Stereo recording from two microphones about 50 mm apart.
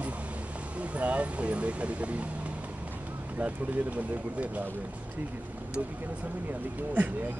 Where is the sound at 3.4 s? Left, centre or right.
Right.